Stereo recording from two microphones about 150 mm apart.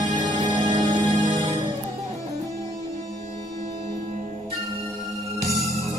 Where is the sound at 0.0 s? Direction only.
25° right (ahead or behind).